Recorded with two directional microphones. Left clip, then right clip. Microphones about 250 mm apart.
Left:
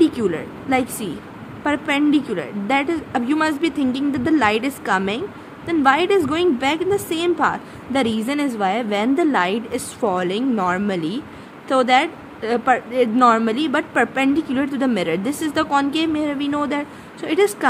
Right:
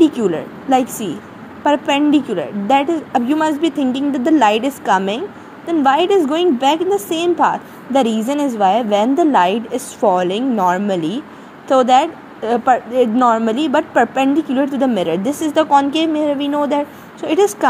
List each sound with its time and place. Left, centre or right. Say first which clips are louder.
0.0 s a woman's voice: right 4 dB; centre
15.2 s a woman's voice: right 4 dB; left
15.5 s a woman's voice: right 7 dB; centre